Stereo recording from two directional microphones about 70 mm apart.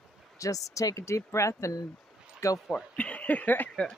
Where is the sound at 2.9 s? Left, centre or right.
Centre.